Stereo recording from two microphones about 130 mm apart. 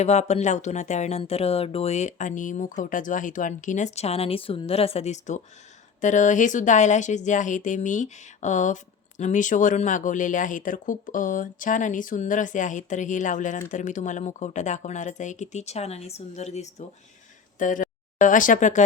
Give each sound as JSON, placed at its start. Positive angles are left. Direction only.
{"t": 0.0, "sound": "speech", "side_deg": 60}
{"t": 1.2, "sound": "speech", "side_deg": 50}
{"t": 17.6, "sound": "speech", "side_deg": 90}